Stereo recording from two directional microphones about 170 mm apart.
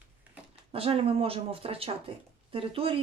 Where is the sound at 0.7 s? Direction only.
35° right (ahead or behind).